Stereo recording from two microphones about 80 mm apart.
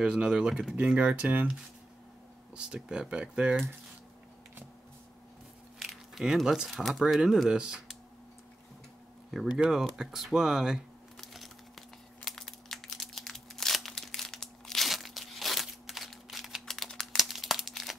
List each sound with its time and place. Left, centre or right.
0.0 s speech: centre
2.5 s speech: centre
5.8 s speech: centre
9.3 s speech: centre
11.1 s crumpling: centre